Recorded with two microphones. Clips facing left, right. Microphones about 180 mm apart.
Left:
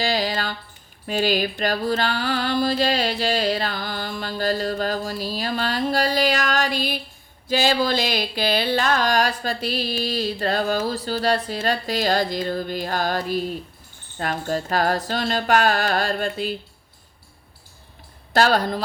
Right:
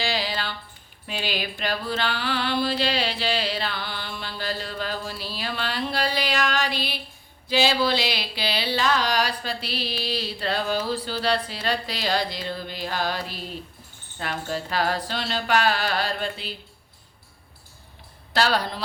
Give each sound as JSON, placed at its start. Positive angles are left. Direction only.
{"t": 0.0, "sound": "a sound", "side_deg": 45}
{"t": 1.0, "sound": "mantra", "side_deg": 45}
{"t": 18.3, "sound": "mantra", "side_deg": 45}